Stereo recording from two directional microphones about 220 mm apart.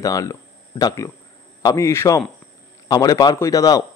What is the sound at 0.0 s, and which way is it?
Speech, 15° left (ahead or behind).